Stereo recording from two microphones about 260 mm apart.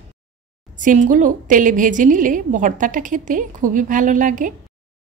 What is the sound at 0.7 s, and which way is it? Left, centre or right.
A woman's voice, right.